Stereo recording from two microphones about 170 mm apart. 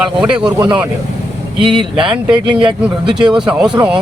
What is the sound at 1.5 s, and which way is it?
Speech, 5° right (ahead or behind).